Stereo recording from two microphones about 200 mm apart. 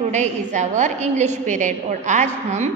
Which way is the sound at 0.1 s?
35° right (ahead or behind).